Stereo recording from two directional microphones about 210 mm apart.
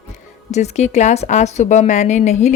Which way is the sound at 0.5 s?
30° left (ahead or behind).